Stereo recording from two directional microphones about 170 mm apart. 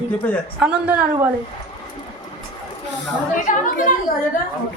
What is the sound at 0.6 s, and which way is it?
Speech, 10° right (ahead or behind).